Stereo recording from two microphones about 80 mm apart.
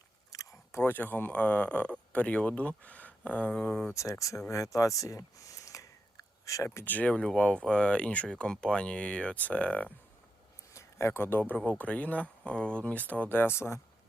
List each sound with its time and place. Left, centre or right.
0.3 s a sound: left
0.8 s speech: left
3.9 s speech: left
4.4 s a sound: left
6.7 s speech: left
10.8 s speech: left